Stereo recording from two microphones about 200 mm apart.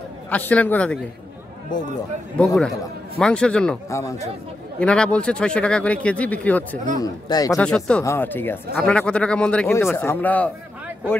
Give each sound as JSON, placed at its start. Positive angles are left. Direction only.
{"t": 0.3, "sound": "speech", "side_deg": 5}
{"t": 2.3, "sound": "speech", "side_deg": 0}
{"t": 4.0, "sound": "speech", "side_deg": 15}
{"t": 4.7, "sound": "speech", "side_deg": 5}
{"t": 7.0, "sound": "speech", "side_deg": 20}
{"t": 7.5, "sound": "speech", "side_deg": 5}